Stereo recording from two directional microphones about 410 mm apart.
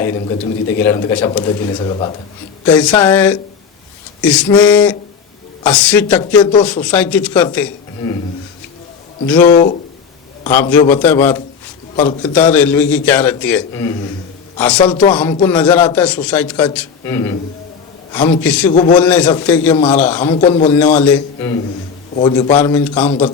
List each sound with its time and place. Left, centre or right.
0.8 s a man's voice: centre
9.3 s a man's voice: centre
18.7 s speech: centre
18.9 s a man's voice: centre
20.2 s speech: centre
20.7 s a man's voice: centre